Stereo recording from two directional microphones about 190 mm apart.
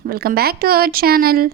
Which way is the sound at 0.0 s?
50° right (ahead or behind).